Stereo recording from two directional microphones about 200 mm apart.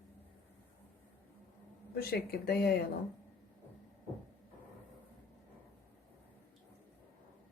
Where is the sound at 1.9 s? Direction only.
50° left (ahead or behind).